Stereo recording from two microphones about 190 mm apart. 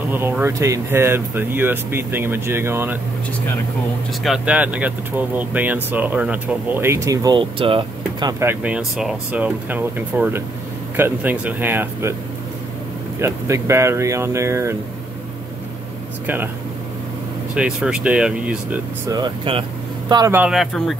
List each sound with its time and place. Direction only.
0.1 s speech: 10° right (ahead or behind)
4.2 s speech: 5° right (ahead or behind)
13.2 s speech: 15° right (ahead or behind)
17.6 s speech: 5° right (ahead or behind)
19.0 s speech: 25° right (ahead or behind)
20.3 s speech: 5° right (ahead or behind)